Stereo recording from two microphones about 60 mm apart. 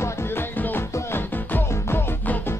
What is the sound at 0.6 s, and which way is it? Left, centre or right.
Music, left.